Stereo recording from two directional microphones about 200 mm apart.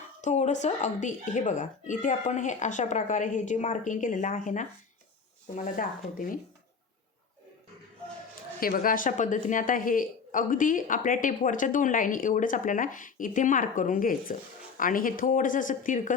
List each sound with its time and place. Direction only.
0.2 s speech: 35° left (ahead or behind)
8.6 s speech: 45° left (ahead or behind)